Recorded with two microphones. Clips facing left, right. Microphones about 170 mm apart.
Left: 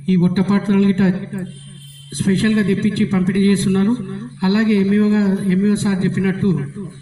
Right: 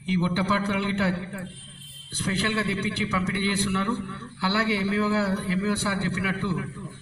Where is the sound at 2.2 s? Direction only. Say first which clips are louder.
Left 12 dB; 50° left (ahead or behind).